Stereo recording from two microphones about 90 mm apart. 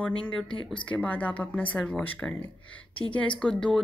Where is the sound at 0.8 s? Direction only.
15° left (ahead or behind).